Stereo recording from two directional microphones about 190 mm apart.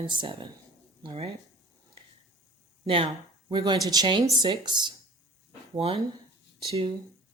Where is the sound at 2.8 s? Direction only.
30° right (ahead or behind).